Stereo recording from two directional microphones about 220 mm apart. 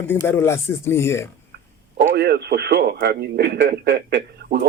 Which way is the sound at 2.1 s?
45° right (ahead or behind).